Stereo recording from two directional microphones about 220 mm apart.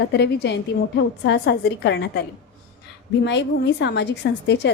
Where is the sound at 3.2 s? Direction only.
55° left (ahead or behind).